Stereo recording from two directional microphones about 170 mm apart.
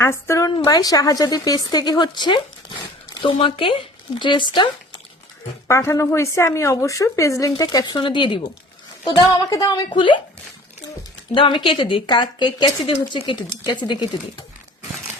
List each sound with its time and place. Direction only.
0.0 s speech: 15° left (ahead or behind)
5.6 s a woman's voice: 15° left (ahead or behind)
11.3 s speech: 30° left (ahead or behind)